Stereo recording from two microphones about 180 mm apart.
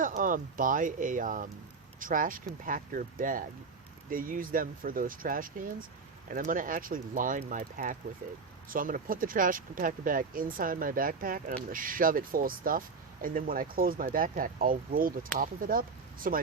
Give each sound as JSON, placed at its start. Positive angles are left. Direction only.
{"t": 0.0, "sound": "speech", "side_deg": -50}